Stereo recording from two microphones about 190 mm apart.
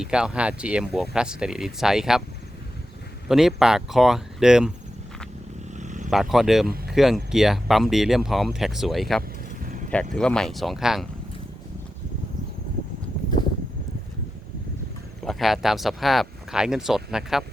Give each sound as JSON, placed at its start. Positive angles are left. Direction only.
{"t": 0.0, "sound": "speech", "side_deg": -5}
{"t": 3.2, "sound": "speech", "side_deg": 0}
{"t": 5.7, "sound": "vehicle", "side_deg": -40}
{"t": 6.1, "sound": "speech", "side_deg": 0}
{"t": 9.6, "sound": "vehicle", "side_deg": -45}
{"t": 10.2, "sound": "speech", "side_deg": 5}
{"t": 15.2, "sound": "speech", "side_deg": 0}